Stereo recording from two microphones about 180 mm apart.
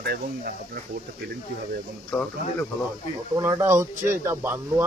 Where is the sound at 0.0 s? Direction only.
60° right (ahead or behind).